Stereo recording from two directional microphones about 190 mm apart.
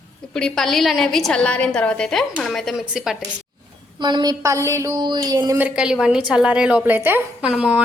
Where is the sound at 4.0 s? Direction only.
20° right (ahead or behind).